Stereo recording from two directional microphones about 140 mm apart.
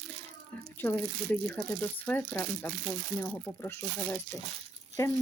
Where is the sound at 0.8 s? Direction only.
15° left (ahead or behind).